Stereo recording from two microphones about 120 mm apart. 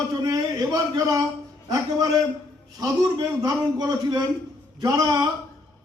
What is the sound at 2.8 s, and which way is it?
A man's voice, 30° right (ahead or behind).